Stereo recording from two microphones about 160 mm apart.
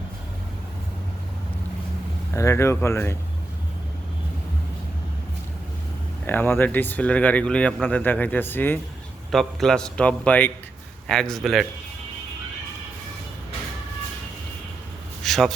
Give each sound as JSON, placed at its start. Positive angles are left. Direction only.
{"t": 2.3, "sound": "speech", "side_deg": 20}
{"t": 6.2, "sound": "speech", "side_deg": 15}
{"t": 9.3, "sound": "a man's voice", "side_deg": 0}
{"t": 15.2, "sound": "a sound", "side_deg": 0}